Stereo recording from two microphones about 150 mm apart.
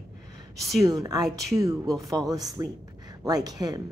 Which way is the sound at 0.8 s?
25° right (ahead or behind).